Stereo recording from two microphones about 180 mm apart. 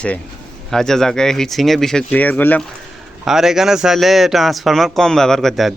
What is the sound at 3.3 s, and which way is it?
Speech, centre (ahead or behind).